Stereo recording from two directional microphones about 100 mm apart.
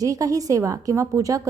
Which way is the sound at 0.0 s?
35° right (ahead or behind).